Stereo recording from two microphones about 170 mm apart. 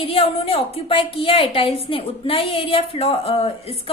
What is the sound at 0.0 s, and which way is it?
A woman's voice, 35° left (ahead or behind).